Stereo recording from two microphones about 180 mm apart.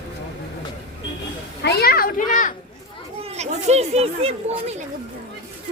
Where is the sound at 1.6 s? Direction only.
65° left (ahead or behind); by 2.5 s 50° left (ahead or behind).